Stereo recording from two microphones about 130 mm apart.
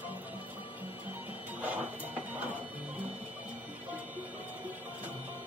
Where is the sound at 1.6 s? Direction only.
10° right (ahead or behind).